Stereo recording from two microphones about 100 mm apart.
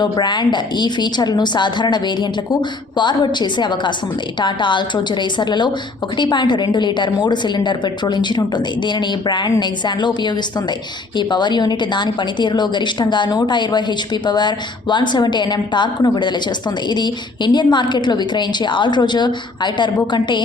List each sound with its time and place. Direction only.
0.0 s a woman's voice: 45° left (ahead or behind)